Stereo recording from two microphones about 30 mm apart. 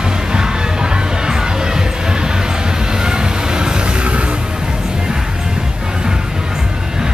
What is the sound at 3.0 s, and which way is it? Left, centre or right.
Vehicle, right.